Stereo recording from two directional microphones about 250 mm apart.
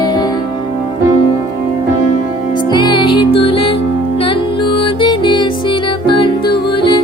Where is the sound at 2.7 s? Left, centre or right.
Centre.